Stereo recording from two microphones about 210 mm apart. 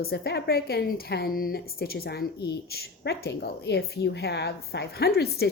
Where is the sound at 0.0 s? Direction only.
50° left (ahead or behind).